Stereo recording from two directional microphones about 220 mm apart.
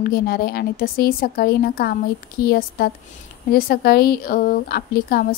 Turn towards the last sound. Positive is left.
turn(degrees=45)  # may be behind; listen again after turning